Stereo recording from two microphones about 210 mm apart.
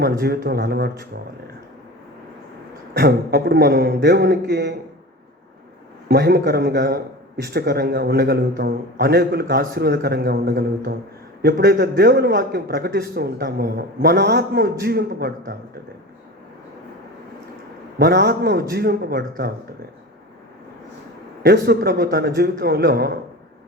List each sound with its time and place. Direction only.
0.0 s a man's voice: 45° right (ahead or behind)
2.9 s a man's voice: 50° right (ahead or behind)
6.1 s a man's voice: 50° right (ahead or behind)
18.0 s a man's voice: 50° right (ahead or behind)
21.4 s a man's voice: 50° right (ahead or behind)